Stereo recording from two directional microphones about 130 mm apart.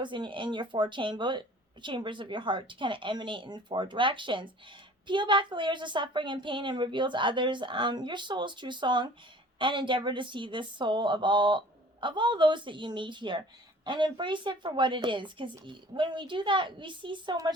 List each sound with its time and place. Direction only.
0.0 s speech: 40° right (ahead or behind)